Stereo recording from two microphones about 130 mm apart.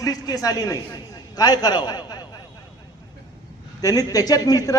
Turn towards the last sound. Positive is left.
turn(degrees=25)  # may be behind; listen again after turning